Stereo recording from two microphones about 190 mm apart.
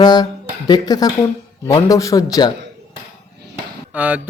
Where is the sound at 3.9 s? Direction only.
10° right (ahead or behind).